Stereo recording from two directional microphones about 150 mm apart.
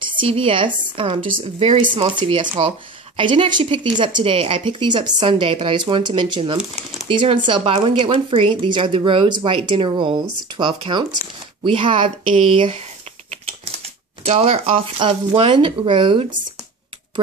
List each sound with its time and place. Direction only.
0.0 s speech: 35° right (ahead or behind)
13.8 s speech: 40° right (ahead or behind)